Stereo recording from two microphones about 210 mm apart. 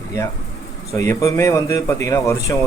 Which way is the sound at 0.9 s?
15° left (ahead or behind).